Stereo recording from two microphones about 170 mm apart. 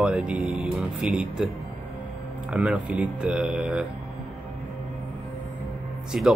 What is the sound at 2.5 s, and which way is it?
Speech, 5° right (ahead or behind).